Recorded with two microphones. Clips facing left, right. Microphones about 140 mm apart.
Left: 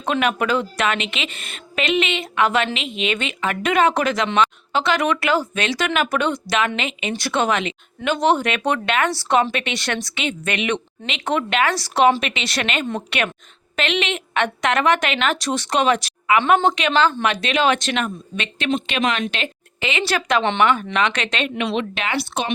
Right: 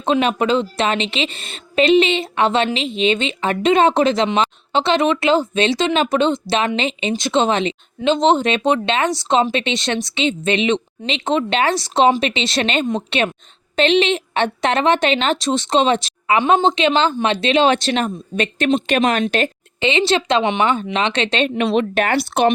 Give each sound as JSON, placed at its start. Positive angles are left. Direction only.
{"t": 0.0, "sound": "speech", "side_deg": -25}
{"t": 19.2, "sound": "a woman's voice", "side_deg": -35}